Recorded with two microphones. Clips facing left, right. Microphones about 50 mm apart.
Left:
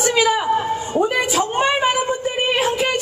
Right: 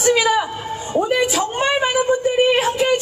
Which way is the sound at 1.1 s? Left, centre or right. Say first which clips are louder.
Even; centre.